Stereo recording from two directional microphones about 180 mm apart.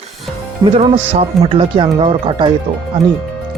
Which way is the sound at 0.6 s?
35° right (ahead or behind).